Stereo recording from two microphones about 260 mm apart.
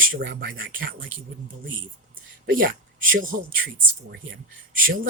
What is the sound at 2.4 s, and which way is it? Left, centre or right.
Speech, right.